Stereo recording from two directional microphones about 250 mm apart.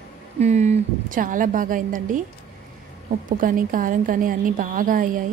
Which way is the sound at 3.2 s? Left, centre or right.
Right.